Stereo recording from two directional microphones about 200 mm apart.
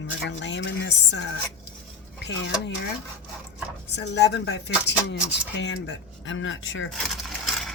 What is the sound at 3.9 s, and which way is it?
Speech, 55° left (ahead or behind).